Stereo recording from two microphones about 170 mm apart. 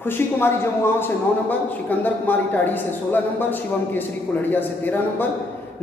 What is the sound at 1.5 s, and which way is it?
Speech, 10° left (ahead or behind).